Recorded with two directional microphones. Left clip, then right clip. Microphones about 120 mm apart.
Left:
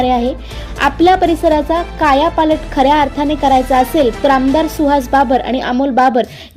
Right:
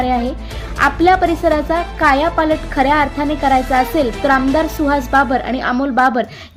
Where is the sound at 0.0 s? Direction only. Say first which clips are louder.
Left 4 dB; 15° left (ahead or behind).